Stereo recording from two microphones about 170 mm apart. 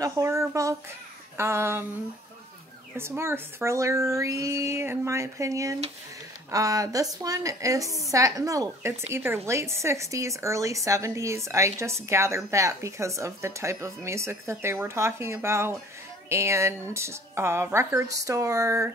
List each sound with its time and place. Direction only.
0.0 s a woman's voice: 20° right (ahead or behind)
3.0 s a woman's voice: 15° right (ahead or behind)